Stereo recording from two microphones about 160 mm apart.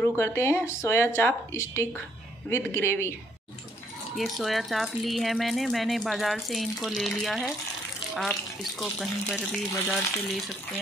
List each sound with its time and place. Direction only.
0.0 s speech: 15° left (ahead or behind)
4.2 s speech: centre (ahead or behind)
8.7 s speech: centre (ahead or behind)